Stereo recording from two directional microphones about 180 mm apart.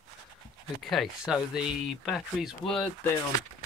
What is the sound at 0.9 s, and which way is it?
Speech, centre (ahead or behind).